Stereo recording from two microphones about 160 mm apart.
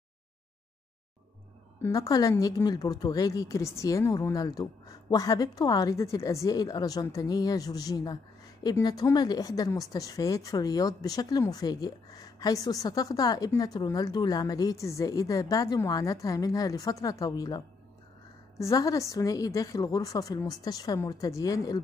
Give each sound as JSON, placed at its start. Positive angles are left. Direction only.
{"t": 1.8, "sound": "a woman's voice", "side_deg": 20}